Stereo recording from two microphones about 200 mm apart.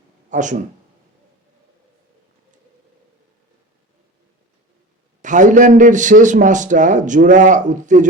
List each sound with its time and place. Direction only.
0.3 s a man's voice: 40° right (ahead or behind)
5.2 s a man's voice: 40° right (ahead or behind)